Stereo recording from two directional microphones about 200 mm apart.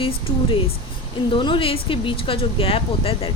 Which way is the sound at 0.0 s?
25° left (ahead or behind).